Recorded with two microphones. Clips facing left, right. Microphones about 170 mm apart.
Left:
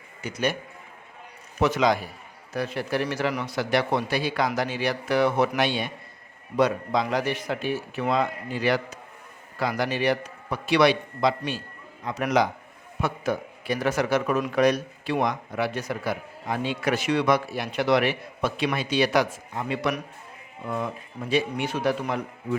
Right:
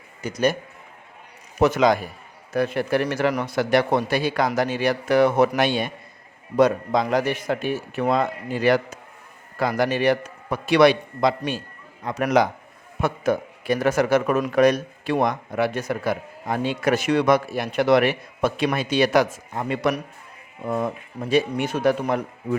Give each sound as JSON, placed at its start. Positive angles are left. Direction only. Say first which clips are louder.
{"t": 0.2, "sound": "a man's voice", "louder": "right 5 dB", "side_deg": -40}
{"t": 1.5, "sound": "a man's voice", "louder": "right 4 dB", "side_deg": -45}